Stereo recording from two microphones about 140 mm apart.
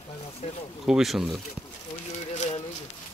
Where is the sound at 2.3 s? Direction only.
55° left (ahead or behind).